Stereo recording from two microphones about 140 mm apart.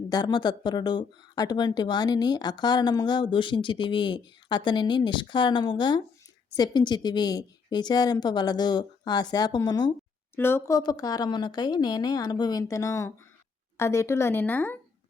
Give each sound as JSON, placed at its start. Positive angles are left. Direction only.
{"t": 0.1, "sound": "a woman's voice", "side_deg": 30}
{"t": 10.3, "sound": "a woman's voice", "side_deg": 15}